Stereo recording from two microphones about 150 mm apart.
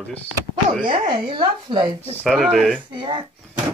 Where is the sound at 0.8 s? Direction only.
35° right (ahead or behind).